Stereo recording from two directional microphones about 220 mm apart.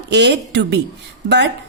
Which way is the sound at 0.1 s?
50° right (ahead or behind).